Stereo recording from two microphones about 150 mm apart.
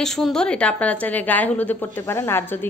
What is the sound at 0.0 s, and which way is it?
A woman's voice, 5° left (ahead or behind).